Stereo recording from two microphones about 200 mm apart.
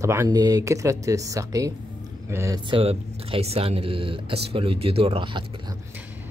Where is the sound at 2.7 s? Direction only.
25° right (ahead or behind).